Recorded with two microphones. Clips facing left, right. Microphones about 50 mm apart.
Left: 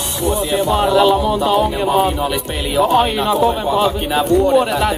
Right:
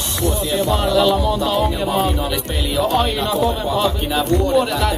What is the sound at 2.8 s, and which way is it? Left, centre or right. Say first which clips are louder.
A man's voice: left 5 dB; centre.